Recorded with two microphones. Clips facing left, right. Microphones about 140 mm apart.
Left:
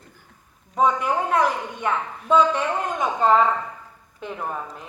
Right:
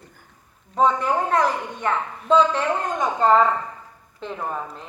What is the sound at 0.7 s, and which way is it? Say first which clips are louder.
A woman's voice: right 1 dB; 10° left (ahead or behind).